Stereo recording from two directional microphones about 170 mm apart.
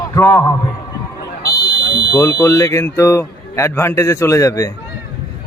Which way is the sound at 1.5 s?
25° left (ahead or behind).